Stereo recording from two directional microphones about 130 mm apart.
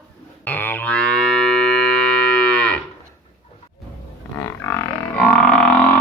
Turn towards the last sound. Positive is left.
turn(degrees=10)  # may be behind; listen again after turning